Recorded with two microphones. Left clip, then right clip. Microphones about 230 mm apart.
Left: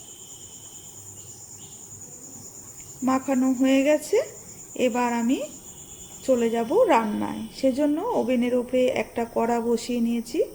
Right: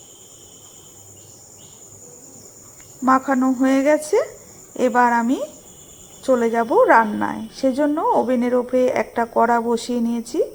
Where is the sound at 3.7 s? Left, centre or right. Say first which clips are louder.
Right 4 dB; right.